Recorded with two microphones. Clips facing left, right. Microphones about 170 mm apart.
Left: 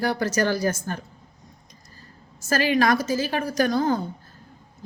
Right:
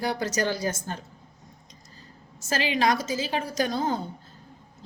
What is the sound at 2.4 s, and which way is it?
Speech, 50° left (ahead or behind).